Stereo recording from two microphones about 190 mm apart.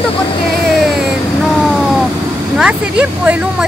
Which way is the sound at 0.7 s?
Centre (ahead or behind).